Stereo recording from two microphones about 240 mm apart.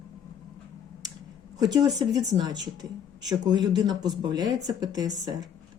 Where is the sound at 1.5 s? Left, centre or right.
Centre.